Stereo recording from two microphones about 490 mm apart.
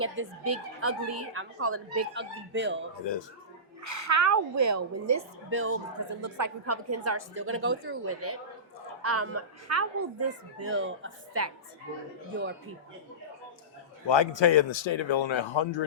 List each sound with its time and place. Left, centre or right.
0.0 s a woman's voice: right
3.1 s a man's voice: left
3.8 s a woman's voice: right
6.2 s a woman's voice: right
14.1 s a man's voice: left